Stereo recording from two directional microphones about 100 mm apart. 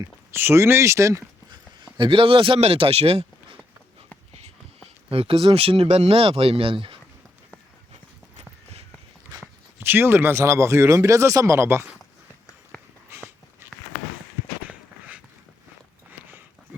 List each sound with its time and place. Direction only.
0.0 s speech: 25° right (ahead or behind)
2.0 s speech: 65° right (ahead or behind)
5.1 s speech: 70° right (ahead or behind)
9.3 s speech: 25° right (ahead or behind)
13.1 s a sound: 25° right (ahead or behind)
14.7 s a sound: 15° right (ahead or behind)